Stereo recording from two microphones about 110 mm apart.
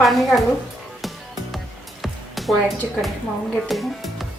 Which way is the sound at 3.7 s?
Centre (ahead or behind).